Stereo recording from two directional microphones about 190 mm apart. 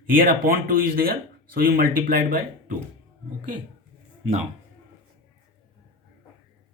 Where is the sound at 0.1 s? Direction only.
50° right (ahead or behind).